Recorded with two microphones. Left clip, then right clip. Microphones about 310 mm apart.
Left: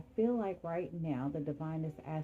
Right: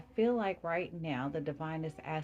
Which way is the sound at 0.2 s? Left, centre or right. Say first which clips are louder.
Right 3 dB; right.